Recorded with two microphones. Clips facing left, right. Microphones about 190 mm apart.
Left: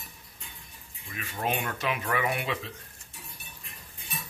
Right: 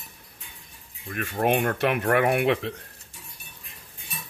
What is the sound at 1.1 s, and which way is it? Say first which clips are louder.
Speech: right 8 dB; 60° right (ahead or behind).